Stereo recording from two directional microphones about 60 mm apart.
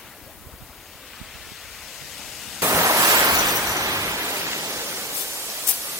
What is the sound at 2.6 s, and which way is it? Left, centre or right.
Pink noise, right.